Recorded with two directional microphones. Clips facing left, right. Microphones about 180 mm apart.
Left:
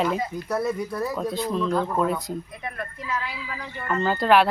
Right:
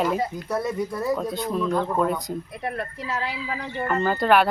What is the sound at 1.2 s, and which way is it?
Speech, centre (ahead or behind).